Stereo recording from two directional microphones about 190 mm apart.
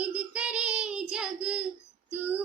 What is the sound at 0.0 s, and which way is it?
Child singing, 5° right (ahead or behind).